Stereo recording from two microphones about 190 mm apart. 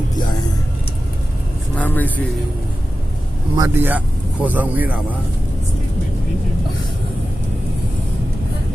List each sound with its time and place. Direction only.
1.7 s vehicle: 10° left (ahead or behind)
3.5 s speech: 20° right (ahead or behind)
3.9 s speech: 10° right (ahead or behind)